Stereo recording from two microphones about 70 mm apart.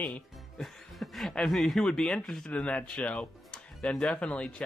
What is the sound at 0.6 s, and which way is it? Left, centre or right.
Speech, centre.